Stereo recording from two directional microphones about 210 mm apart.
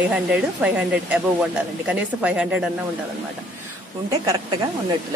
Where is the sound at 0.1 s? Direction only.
5° right (ahead or behind).